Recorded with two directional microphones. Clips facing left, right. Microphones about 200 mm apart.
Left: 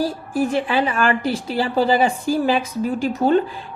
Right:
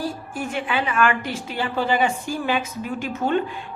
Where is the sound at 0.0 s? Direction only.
35° left (ahead or behind).